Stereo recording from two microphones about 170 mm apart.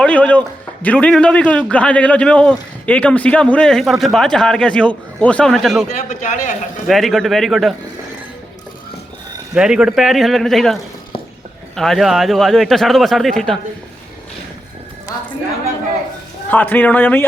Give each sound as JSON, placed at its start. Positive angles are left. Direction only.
{"t": 0.0, "sound": "a man's voice", "side_deg": 10}
{"t": 6.1, "sound": "a man's voice", "side_deg": 45}
{"t": 6.8, "sound": "a man's voice", "side_deg": 0}
{"t": 9.6, "sound": "a man's voice", "side_deg": -5}
{"t": 11.8, "sound": "a man's voice", "side_deg": 0}
{"t": 15.1, "sound": "a woman's voice", "side_deg": 20}
{"t": 16.5, "sound": "a man's voice", "side_deg": 10}